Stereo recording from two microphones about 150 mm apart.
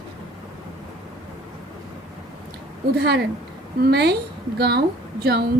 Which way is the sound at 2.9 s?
90° right.